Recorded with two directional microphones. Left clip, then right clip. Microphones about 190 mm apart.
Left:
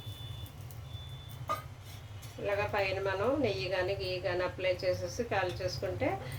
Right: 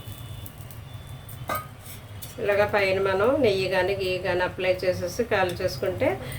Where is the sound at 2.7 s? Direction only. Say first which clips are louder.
Right 10 dB; 25° right (ahead or behind).